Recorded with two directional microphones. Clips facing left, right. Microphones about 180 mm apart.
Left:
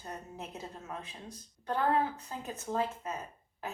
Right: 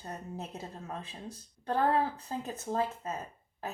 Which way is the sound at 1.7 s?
30° right (ahead or behind).